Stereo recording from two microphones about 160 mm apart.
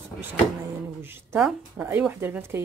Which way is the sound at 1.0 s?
15° right (ahead or behind).